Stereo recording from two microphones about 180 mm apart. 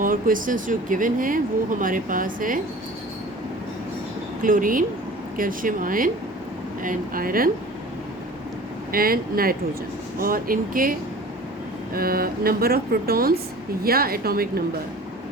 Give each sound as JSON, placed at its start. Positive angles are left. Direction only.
{"t": 0.0, "sound": "speech", "side_deg": -50}
{"t": 4.4, "sound": "speech", "side_deg": -50}
{"t": 8.9, "sound": "speech", "side_deg": -55}
{"t": 11.9, "sound": "speech", "side_deg": -55}